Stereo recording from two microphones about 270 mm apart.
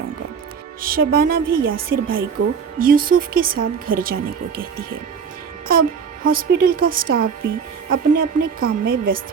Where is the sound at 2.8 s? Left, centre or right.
Right.